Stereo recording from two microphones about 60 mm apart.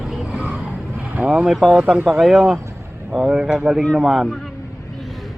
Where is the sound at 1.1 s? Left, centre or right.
Centre.